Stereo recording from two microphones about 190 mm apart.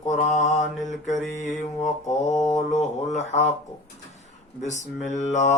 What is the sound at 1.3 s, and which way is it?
Mantra, 40° left (ahead or behind).